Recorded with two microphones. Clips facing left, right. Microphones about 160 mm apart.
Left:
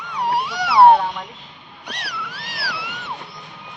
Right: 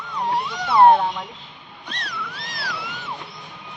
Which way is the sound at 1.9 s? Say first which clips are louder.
Left 1 dB; 10° left (ahead or behind).